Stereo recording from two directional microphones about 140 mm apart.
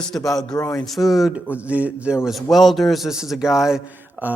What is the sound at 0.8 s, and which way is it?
Speech, centre (ahead or behind).